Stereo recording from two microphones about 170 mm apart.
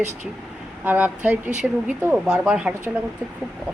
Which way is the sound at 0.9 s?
10° right (ahead or behind).